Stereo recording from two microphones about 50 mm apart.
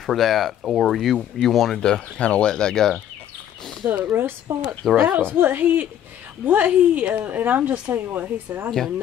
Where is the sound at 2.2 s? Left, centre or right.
Centre.